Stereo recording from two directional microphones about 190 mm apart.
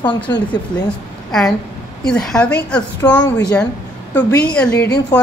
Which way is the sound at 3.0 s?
20° left (ahead or behind).